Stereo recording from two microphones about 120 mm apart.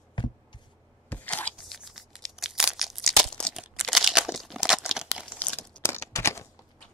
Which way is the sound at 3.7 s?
Centre (ahead or behind).